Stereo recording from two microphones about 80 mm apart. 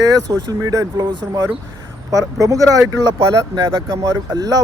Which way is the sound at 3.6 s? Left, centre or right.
Right.